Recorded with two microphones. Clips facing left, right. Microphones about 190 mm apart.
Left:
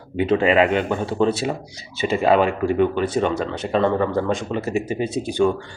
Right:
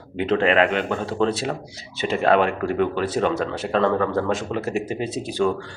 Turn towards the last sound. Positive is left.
turn(degrees=0)  # may be behind; listen again after turning